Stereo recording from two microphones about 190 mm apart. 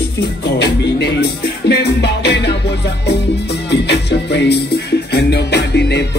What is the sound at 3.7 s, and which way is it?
Music, 60° left (ahead or behind).